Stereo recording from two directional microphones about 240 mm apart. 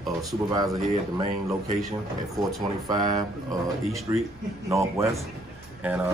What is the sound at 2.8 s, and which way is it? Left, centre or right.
Speech, centre.